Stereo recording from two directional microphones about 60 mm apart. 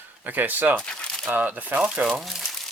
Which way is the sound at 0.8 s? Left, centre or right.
Centre.